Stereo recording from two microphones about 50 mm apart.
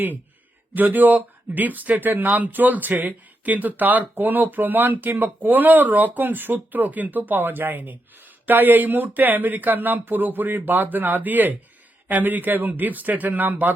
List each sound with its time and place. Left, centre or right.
0.8 s speech: right